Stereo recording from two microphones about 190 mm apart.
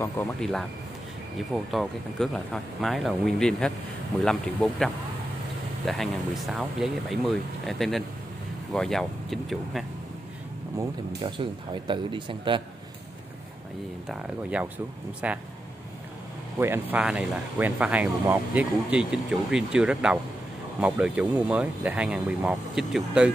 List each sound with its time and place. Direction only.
0.0 s speech: 5° left (ahead or behind)
10.8 s speech: 25° right (ahead or behind)
14.0 s speech: 5° right (ahead or behind)
16.5 s speech: 10° right (ahead or behind)